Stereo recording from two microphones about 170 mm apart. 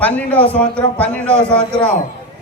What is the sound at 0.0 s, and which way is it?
Speech, 10° left (ahead or behind).